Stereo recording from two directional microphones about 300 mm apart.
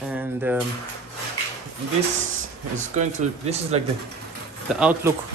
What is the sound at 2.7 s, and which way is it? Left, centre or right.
Speech, right.